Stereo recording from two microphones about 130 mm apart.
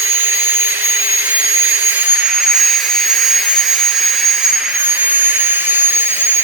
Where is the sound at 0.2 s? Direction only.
15° right (ahead or behind).